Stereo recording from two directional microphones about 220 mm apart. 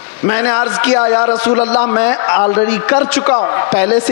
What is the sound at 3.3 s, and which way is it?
Speech, 25° left (ahead or behind).